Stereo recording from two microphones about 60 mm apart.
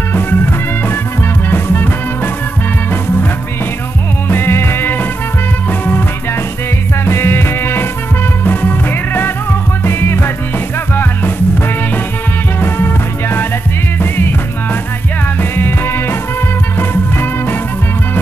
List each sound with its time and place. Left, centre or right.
1.5 s music: left
4.3 s music: left
7.1 s music: left
12.5 s music: left